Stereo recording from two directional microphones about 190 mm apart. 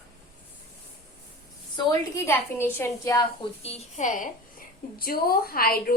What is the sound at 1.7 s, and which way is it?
A woman's voice, 20° left (ahead or behind).